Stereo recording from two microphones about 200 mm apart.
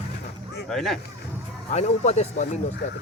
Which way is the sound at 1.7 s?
35° left (ahead or behind).